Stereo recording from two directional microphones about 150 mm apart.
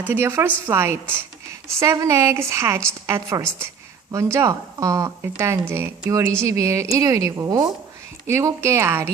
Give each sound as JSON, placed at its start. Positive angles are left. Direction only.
{"t": 0.0, "sound": "a woman's voice", "side_deg": -15}